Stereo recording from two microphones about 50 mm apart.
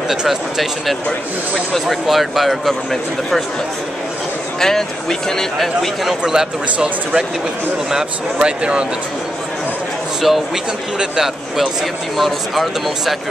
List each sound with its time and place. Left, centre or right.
0.1 s speech: centre
4.6 s speech: centre
6.2 s speech: centre
10.2 s speech: centre